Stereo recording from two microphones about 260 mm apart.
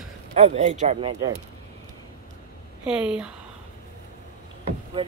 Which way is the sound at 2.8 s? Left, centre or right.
Centre.